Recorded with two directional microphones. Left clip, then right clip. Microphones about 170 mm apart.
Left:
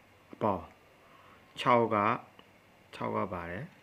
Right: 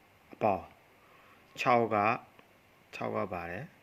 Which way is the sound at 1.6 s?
15° right (ahead or behind).